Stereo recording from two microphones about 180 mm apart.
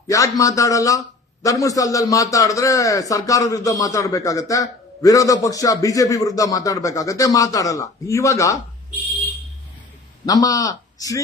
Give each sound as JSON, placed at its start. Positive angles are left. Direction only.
{"t": 0.1, "sound": "a man's voice", "side_deg": 20}
{"t": 10.2, "sound": "a man's voice", "side_deg": 20}